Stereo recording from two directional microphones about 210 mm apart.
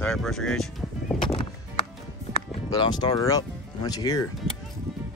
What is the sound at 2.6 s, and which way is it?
Speech, 20° left (ahead or behind).